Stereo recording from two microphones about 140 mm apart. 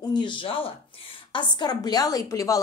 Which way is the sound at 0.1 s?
35° left (ahead or behind).